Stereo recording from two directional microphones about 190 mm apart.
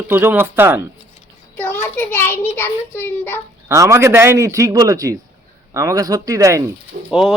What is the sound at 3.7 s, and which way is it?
Speech, 15° right (ahead or behind).